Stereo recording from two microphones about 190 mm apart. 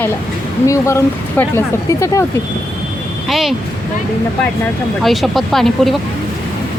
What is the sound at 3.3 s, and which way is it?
Speech, centre (ahead or behind).